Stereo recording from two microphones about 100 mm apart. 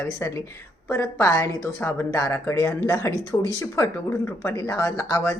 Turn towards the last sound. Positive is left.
turn(degrees=30)  # may be behind; listen again after turning